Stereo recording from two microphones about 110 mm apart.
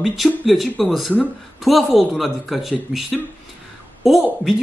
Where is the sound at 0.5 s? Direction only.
Centre (ahead or behind).